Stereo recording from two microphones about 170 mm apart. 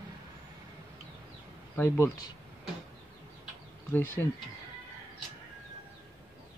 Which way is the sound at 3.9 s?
15° left (ahead or behind).